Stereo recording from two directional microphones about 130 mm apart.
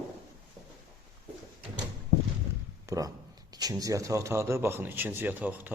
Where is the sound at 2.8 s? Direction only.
25° right (ahead or behind).